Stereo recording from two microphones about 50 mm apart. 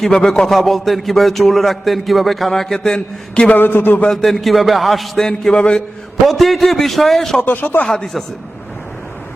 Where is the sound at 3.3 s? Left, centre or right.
Left.